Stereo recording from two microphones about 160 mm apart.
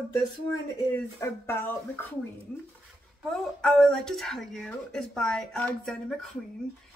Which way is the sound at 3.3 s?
5° left (ahead or behind).